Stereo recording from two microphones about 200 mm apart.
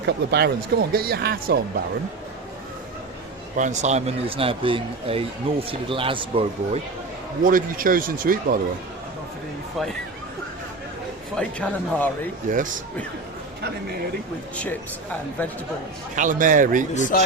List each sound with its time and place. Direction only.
0.0 s speech: 55° right (ahead or behind)
3.6 s speech: 35° right (ahead or behind)
7.4 s speech: 45° right (ahead or behind)
11.3 s speech: 5° left (ahead or behind)
12.5 s a man's voice: 40° right (ahead or behind)
14.5 s speech: 5° left (ahead or behind)
16.1 s a man's voice: 40° right (ahead or behind)
16.9 s speech: 40° left (ahead or behind)